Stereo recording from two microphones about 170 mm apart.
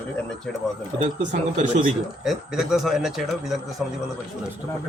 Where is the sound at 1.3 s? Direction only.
50° right (ahead or behind).